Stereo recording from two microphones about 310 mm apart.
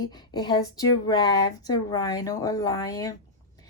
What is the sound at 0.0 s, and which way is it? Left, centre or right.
A woman's voice, centre.